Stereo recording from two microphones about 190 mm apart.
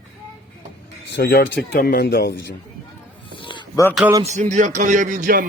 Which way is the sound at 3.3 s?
25° left (ahead or behind).